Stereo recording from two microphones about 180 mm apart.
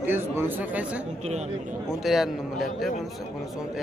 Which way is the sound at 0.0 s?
10° right (ahead or behind).